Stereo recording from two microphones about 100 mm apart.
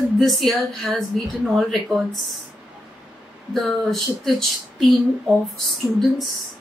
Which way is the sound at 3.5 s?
Centre (ahead or behind).